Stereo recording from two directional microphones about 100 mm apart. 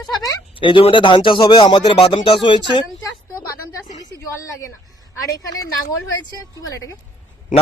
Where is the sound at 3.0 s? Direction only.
35° left (ahead or behind).